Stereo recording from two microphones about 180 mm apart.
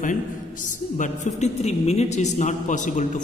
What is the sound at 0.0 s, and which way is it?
A man's voice, 45° left (ahead or behind).